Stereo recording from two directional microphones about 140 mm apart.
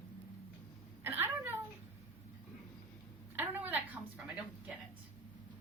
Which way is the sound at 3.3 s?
15° right (ahead or behind).